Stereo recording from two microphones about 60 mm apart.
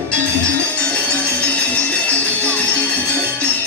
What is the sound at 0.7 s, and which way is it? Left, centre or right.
Music, left.